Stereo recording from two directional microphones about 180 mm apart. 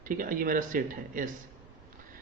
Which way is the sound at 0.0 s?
50° right (ahead or behind).